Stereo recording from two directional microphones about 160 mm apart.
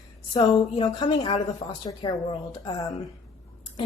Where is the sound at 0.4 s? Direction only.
25° left (ahead or behind).